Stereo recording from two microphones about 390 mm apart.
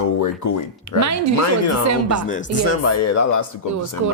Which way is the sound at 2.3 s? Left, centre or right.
Left.